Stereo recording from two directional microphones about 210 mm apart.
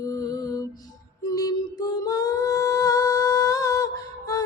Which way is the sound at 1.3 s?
15° left (ahead or behind).